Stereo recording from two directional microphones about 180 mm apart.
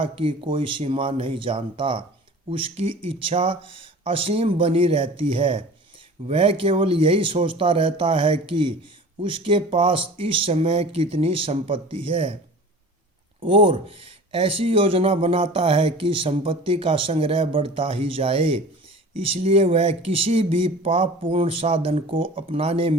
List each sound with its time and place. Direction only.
0.0 s speech: 30° right (ahead or behind)
13.4 s speech: 30° right (ahead or behind)